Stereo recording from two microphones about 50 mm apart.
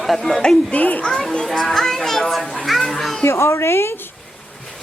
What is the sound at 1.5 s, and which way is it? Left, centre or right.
Speech, centre.